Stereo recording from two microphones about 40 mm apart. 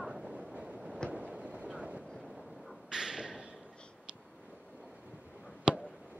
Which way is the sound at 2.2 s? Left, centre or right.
Centre.